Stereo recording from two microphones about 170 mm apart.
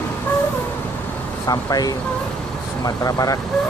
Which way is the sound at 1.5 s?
20° left (ahead or behind).